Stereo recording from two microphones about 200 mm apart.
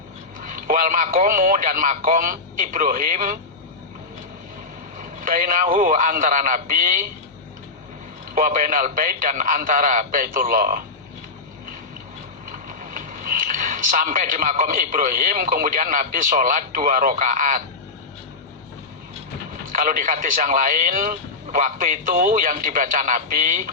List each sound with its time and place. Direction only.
0.3 s a man's voice: 45° right (ahead or behind)
5.2 s speech: 45° right (ahead or behind)
8.4 s speech: 40° right (ahead or behind)
12.6 s a man's voice: 40° right (ahead or behind)
19.7 s speech: 40° right (ahead or behind)